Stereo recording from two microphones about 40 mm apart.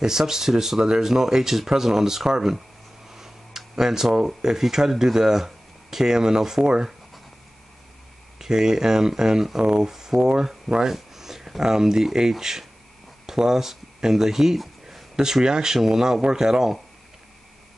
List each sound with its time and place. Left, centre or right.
0.0 s speech: centre
8.4 s speech: centre
9.6 s speech: right
9.8 s speech: centre